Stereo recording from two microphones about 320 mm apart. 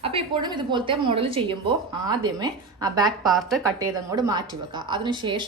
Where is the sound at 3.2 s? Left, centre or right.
Centre.